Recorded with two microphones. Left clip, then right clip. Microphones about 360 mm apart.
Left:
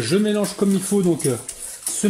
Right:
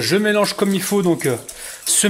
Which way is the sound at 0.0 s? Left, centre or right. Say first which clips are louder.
Right 3 dB; centre.